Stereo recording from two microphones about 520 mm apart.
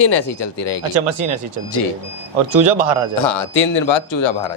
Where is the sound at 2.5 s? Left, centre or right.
Right.